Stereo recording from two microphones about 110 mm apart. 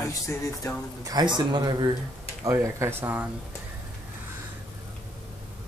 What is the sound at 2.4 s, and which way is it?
Speech, 30° right (ahead or behind).